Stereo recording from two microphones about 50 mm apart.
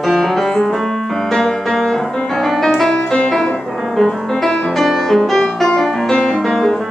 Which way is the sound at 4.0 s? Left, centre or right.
Centre.